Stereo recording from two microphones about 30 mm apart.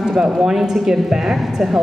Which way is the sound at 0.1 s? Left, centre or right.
Centre.